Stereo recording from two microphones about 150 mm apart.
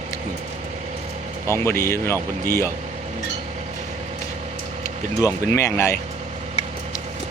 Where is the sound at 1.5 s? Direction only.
15° left (ahead or behind).